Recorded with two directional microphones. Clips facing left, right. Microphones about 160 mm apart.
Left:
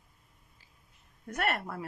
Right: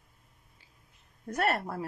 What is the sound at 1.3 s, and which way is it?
Speech, 35° right (ahead or behind).